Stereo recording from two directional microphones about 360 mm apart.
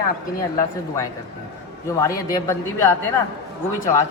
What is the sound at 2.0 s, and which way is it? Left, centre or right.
Speech, centre.